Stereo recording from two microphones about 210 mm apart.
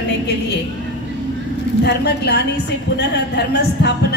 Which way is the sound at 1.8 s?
50° left (ahead or behind).